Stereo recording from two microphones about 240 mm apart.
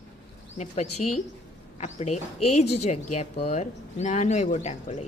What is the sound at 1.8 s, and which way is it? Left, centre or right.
Speech, left.